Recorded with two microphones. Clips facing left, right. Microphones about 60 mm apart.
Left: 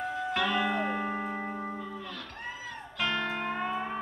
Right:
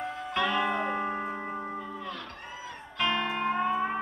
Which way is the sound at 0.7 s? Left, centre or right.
Centre.